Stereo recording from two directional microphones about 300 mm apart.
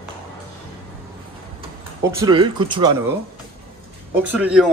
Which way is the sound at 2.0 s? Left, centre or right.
Centre.